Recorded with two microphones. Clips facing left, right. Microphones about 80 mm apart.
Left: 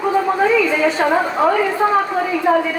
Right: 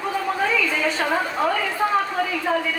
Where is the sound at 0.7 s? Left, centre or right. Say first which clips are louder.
Left 7 dB; left.